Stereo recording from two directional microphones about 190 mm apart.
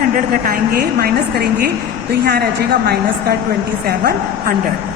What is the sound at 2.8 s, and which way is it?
A woman's voice, 55° right (ahead or behind).